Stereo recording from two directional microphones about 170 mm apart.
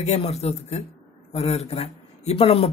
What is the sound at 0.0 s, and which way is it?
Speech, 40° left (ahead or behind).